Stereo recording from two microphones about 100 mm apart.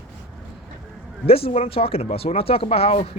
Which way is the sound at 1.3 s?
70° left (ahead or behind).